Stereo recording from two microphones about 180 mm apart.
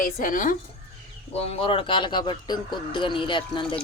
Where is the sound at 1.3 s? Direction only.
35° left (ahead or behind).